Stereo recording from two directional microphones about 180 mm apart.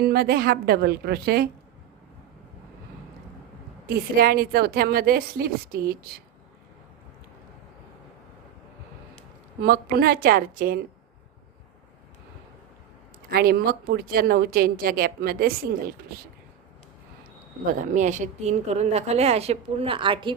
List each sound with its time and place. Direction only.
0.0 s a woman's voice: 60° right (ahead or behind)
3.8 s a woman's voice: 55° right (ahead or behind)
9.6 s a woman's voice: 55° right (ahead or behind)
13.3 s a woman's voice: 55° right (ahead or behind)
17.7 s a woman's voice: 45° right (ahead or behind); by 20.3 s 25° right (ahead or behind)